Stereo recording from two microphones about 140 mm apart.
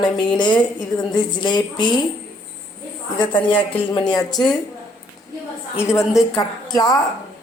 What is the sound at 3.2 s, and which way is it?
A woman's voice, 35° left (ahead or behind).